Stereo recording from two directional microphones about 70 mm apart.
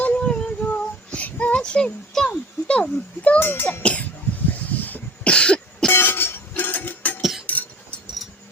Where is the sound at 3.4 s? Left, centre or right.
Left.